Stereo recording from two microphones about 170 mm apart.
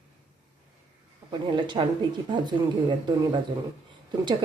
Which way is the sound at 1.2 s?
25° right (ahead or behind).